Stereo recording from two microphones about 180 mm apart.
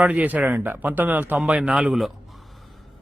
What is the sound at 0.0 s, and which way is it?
Speech, 10° right (ahead or behind).